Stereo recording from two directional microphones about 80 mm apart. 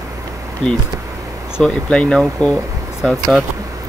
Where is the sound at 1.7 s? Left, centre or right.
Centre.